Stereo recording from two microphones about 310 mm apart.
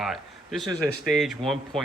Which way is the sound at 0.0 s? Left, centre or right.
Centre.